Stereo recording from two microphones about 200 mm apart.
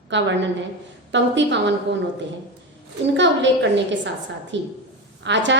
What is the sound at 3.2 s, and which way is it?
A woman's voice, 65° right (ahead or behind).